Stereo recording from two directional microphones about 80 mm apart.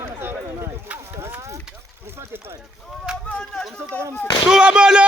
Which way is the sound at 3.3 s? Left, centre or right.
Centre.